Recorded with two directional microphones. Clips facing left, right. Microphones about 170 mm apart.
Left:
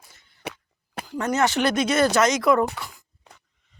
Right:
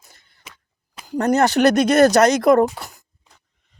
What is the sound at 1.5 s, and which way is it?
Speech, 60° right (ahead or behind).